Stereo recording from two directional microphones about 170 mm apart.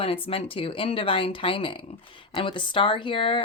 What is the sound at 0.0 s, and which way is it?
Speech, 35° left (ahead or behind).